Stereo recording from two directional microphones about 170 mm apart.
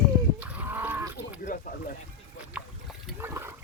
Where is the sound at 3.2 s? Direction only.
15° right (ahead or behind).